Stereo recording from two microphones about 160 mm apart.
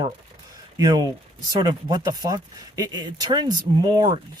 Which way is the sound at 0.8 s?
25° right (ahead or behind).